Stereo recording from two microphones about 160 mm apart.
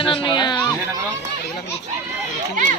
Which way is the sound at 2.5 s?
55° right (ahead or behind).